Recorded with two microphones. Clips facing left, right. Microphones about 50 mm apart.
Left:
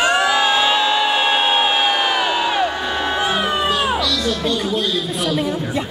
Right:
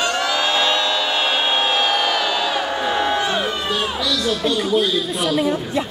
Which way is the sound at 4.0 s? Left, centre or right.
Centre.